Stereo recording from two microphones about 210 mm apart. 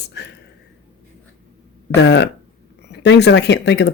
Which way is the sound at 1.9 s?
55° left (ahead or behind).